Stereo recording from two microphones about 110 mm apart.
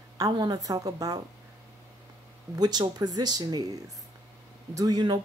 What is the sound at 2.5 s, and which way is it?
A woman's voice, 40° right (ahead or behind).